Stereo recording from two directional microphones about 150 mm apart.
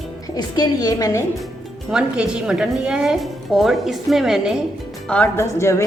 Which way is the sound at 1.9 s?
5° right (ahead or behind).